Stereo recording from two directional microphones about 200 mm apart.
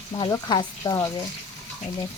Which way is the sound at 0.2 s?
20° left (ahead or behind).